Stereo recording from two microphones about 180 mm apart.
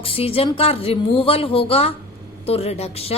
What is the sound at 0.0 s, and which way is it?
A woman's voice, 30° left (ahead or behind).